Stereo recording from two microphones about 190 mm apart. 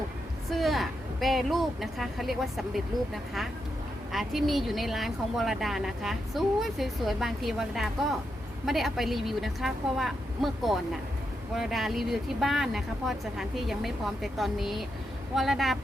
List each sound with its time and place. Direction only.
0.5 s speech: centre (ahead or behind)
4.1 s speech: centre (ahead or behind)